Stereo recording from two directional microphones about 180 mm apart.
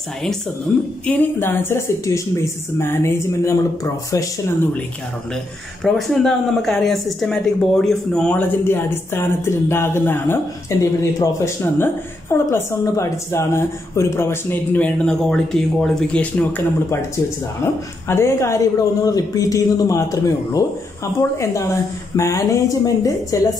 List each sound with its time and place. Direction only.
0.7 s a woman's voice: 5° left (ahead or behind)
5.9 s speech: centre (ahead or behind)
18.0 s speech: 15° left (ahead or behind)